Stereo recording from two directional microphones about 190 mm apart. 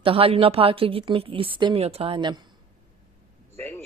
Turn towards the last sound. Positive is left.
turn(degrees=10)  # may be behind; listen again after turning